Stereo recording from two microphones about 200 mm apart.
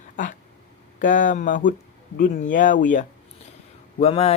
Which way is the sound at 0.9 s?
40° left (ahead or behind).